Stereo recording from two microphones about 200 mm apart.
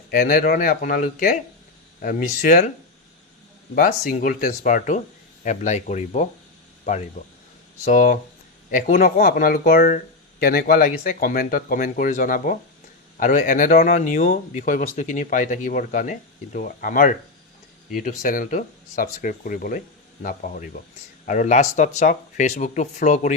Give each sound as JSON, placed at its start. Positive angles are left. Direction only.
{"t": 0.1, "sound": "speech", "side_deg": 50}
{"t": 3.8, "sound": "speech", "side_deg": 45}